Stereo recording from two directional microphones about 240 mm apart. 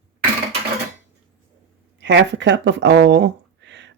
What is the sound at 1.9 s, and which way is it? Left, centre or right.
Speech, right.